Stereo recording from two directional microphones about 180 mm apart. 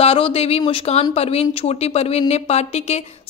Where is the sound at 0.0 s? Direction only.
35° left (ahead or behind).